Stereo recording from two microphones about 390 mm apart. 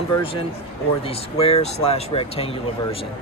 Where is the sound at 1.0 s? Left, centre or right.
Centre.